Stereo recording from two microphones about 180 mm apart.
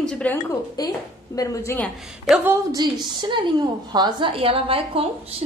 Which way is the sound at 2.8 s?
25° right (ahead or behind).